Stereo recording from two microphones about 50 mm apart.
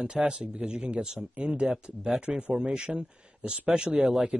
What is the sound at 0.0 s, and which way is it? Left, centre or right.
Speech, centre.